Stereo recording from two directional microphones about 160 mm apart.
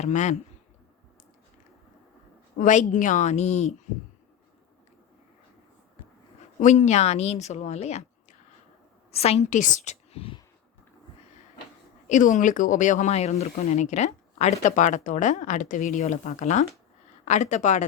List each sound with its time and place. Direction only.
0.0 s speech: 45° left (ahead or behind)
2.6 s speech: 50° left (ahead or behind)
6.6 s speech: 45° left (ahead or behind)
12.0 s speech: 50° left (ahead or behind)